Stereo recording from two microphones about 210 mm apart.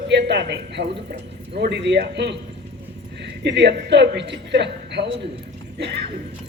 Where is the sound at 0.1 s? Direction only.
55° right (ahead or behind).